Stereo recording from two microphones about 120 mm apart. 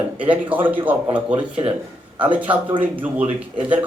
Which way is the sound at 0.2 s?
15° right (ahead or behind).